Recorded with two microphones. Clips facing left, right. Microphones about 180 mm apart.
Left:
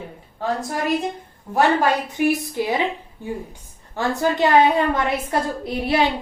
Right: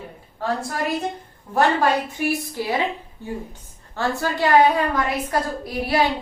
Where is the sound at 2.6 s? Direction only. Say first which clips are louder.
Left 2 dB; 20° left (ahead or behind).